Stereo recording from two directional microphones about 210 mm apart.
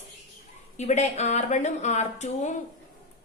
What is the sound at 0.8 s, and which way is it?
A woman's voice, 35° left (ahead or behind).